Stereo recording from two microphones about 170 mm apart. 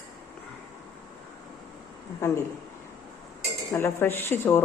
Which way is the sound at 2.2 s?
15° left (ahead or behind).